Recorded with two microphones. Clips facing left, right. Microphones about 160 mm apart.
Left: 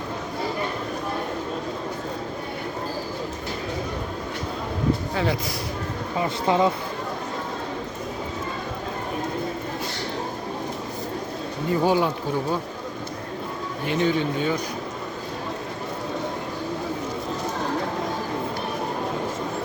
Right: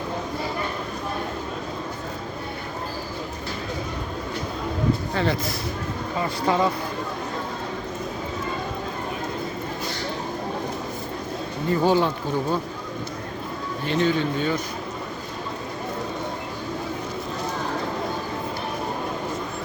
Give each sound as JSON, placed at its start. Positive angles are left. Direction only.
{"t": 5.1, "sound": "speech", "side_deg": 10}
{"t": 6.1, "sound": "speech", "side_deg": 20}
{"t": 11.8, "sound": "speech", "side_deg": 10}
{"t": 13.8, "sound": "speech", "side_deg": 10}